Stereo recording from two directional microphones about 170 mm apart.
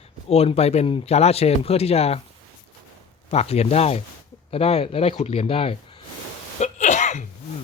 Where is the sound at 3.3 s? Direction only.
40° left (ahead or behind).